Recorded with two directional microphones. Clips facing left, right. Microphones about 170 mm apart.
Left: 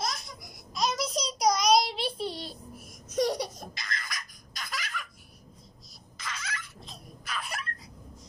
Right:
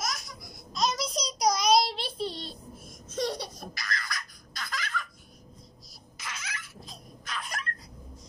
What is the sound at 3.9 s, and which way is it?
Baby laughter, 20° left (ahead or behind).